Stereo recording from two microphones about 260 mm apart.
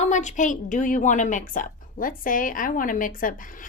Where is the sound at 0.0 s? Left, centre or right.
Left.